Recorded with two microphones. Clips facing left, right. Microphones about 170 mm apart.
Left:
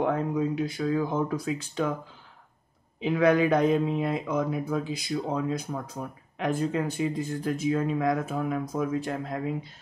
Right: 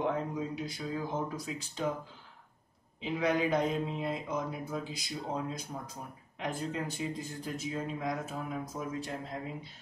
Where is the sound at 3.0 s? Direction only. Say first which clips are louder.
Left 8 dB; 65° left (ahead or behind).